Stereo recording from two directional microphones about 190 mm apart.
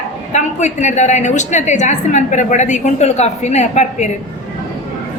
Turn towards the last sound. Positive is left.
turn(degrees=35)  # may be behind; listen again after turning